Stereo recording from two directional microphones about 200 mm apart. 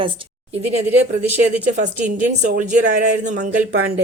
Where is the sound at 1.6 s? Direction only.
40° right (ahead or behind).